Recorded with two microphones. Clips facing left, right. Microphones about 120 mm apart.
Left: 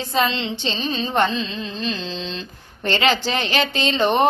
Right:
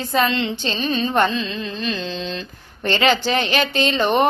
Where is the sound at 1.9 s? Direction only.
45° right (ahead or behind).